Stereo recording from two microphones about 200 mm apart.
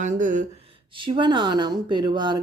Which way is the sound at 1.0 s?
25° right (ahead or behind).